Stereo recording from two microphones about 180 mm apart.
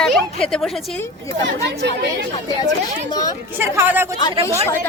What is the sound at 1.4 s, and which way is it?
Speech, 70° right (ahead or behind).